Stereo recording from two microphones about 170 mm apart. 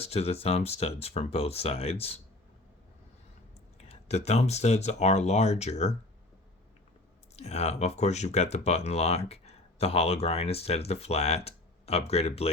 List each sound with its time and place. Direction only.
0.0 s speech: 35° left (ahead or behind)
3.8 s speech: 40° left (ahead or behind)
7.3 s speech: 40° left (ahead or behind)